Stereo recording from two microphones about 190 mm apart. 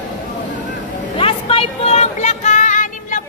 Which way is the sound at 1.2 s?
30° left (ahead or behind).